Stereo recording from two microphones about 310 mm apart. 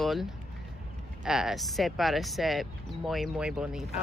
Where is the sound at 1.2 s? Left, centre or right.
Centre.